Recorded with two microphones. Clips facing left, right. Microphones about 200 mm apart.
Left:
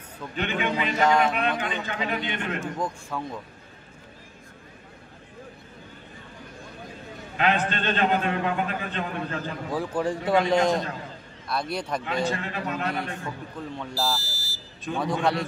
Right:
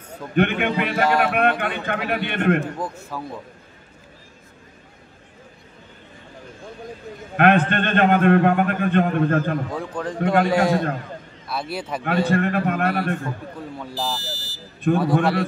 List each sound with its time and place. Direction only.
0.3 s a man's voice: 60° right (ahead or behind)
2.8 s a man's voice: 5° right (ahead or behind)
7.3 s a man's voice: 60° right (ahead or behind)
9.7 s a man's voice: 5° left (ahead or behind)
10.5 s a man's voice: 5° right (ahead or behind)
12.0 s a man's voice: 60° right (ahead or behind)
13.9 s speech: 10° left (ahead or behind)
14.8 s a man's voice: 55° right (ahead or behind)